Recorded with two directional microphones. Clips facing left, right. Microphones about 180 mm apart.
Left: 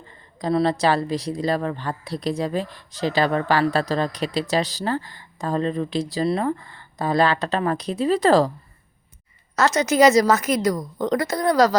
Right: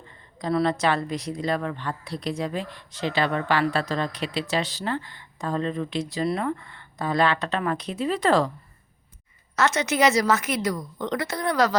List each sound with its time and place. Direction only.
0.3 s a woman's voice: 35° left (ahead or behind)
9.6 s a woman's voice: 40° left (ahead or behind)